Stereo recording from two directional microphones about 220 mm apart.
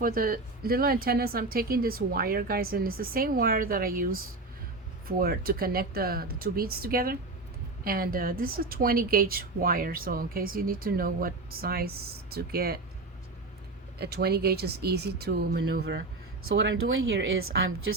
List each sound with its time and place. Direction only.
0.0 s speech: 40° right (ahead or behind)
14.0 s speech: 45° right (ahead or behind)
16.6 s speech: 55° right (ahead or behind)